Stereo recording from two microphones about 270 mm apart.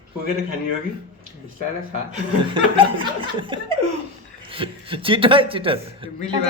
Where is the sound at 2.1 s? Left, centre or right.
Centre.